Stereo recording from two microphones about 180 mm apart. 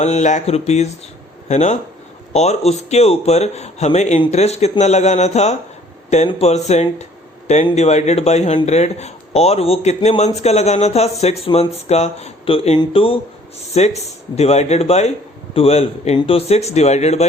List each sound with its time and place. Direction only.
0.0 s a man's voice: 40° left (ahead or behind)